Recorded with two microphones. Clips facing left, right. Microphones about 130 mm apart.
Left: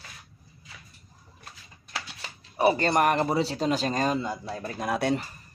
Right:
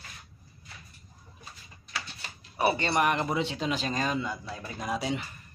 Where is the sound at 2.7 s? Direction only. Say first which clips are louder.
Left 4 dB; 45° left (ahead or behind).